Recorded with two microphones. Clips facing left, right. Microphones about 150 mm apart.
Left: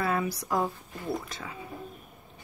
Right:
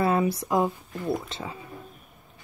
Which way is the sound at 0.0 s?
25° right (ahead or behind).